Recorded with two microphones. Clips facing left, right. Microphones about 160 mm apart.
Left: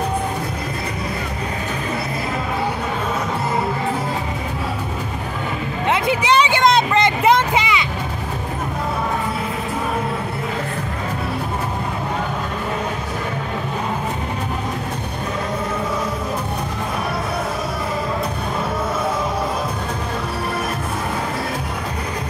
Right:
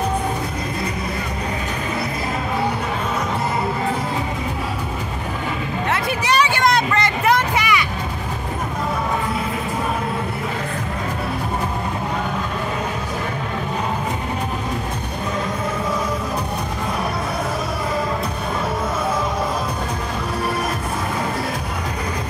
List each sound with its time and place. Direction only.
5.9 s music: 20° left (ahead or behind)